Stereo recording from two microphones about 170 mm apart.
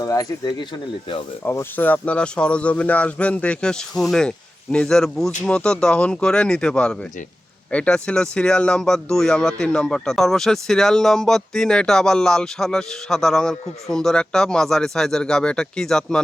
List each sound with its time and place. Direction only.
0.0 s speech: 20° left (ahead or behind); by 16.2 s 5° left (ahead or behind)